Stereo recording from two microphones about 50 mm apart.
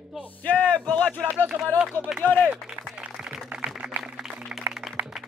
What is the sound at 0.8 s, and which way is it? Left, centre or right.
Speech, left.